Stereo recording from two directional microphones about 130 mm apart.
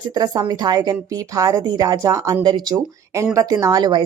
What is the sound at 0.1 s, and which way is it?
Speech, 30° right (ahead or behind).